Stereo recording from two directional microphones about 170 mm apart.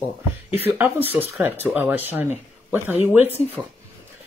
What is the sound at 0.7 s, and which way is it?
Speech, 10° right (ahead or behind).